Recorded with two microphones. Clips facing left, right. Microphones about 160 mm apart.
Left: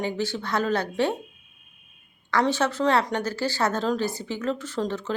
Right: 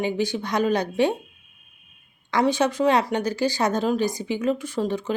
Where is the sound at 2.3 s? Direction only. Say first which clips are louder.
Right 2 dB; 15° right (ahead or behind).